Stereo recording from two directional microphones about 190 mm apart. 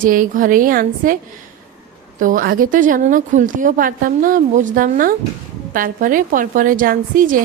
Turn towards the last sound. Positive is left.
turn(degrees=-45)  # may be behind; listen again after turning